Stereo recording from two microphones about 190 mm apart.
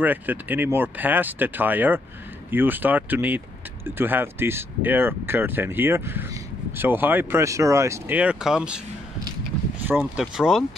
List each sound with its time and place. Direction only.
0.0 s speech: 10° right (ahead or behind)
9.8 s speech: 5° right (ahead or behind)